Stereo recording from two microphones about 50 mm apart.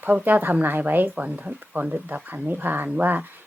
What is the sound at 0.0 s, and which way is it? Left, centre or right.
Speech, right.